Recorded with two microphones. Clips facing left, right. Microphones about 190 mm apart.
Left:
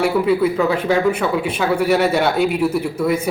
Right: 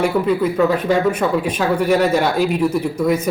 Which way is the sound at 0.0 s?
10° left (ahead or behind).